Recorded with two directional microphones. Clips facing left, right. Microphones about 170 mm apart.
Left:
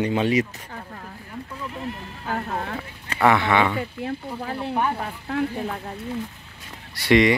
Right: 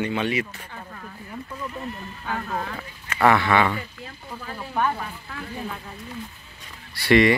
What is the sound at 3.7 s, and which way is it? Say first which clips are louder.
Speech: left 8 dB; 65° left (ahead or behind).